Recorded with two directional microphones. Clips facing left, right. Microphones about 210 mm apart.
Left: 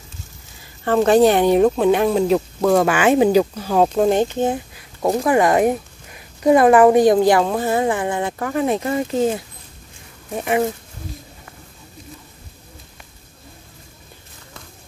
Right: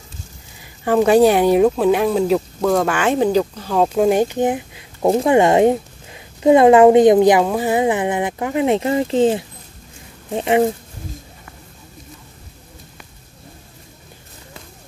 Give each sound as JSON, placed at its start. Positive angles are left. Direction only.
{"t": 0.8, "sound": "speech", "side_deg": -10}
{"t": 3.9, "sound": "speech", "side_deg": -10}